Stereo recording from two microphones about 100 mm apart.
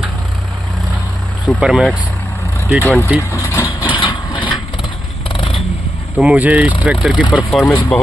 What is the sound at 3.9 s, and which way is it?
Vehicle, 55° left (ahead or behind).